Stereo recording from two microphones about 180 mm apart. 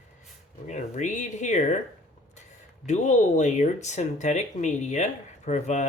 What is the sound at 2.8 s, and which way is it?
Speech, 40° left (ahead or behind).